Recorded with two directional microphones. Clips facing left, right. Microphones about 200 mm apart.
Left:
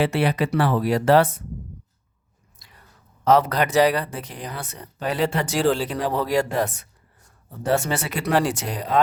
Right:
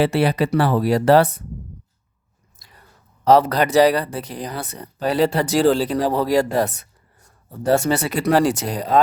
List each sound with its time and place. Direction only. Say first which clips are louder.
0.0 s speech: right 3 dB; 35° right (ahead or behind)
3.2 s speech: right 3 dB; 35° right (ahead or behind)